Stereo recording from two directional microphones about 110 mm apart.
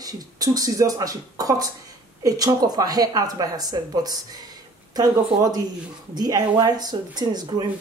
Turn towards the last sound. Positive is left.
turn(degrees=-40)  # may be behind; listen again after turning